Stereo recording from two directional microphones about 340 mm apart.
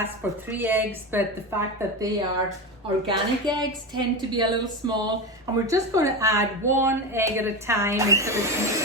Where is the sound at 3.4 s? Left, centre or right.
Centre.